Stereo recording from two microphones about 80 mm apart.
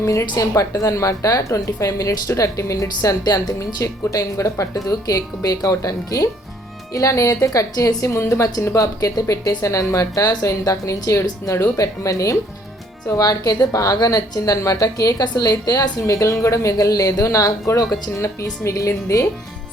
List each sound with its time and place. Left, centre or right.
0.0 s a woman's voice: left